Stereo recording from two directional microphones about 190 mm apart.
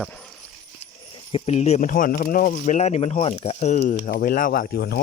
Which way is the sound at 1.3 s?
35° left (ahead or behind).